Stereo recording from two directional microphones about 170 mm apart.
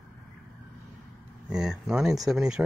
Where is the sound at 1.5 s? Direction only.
5° right (ahead or behind).